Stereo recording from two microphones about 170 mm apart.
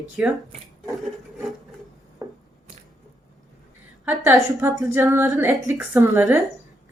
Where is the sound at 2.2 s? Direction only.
20° right (ahead or behind).